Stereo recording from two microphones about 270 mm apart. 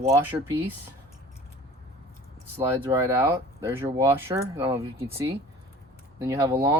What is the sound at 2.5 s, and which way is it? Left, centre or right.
Speech, centre.